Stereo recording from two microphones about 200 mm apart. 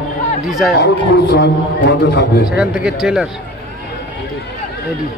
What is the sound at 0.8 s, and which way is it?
A man's voice, 60° left (ahead or behind).